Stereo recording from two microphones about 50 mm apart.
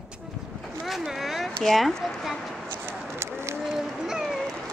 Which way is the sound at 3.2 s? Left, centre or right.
Right.